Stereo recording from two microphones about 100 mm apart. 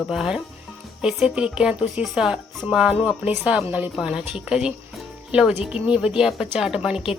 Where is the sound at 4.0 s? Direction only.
5° right (ahead or behind).